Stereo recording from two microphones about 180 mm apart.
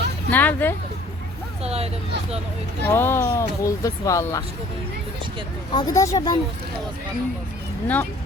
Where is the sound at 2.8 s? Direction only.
10° left (ahead or behind).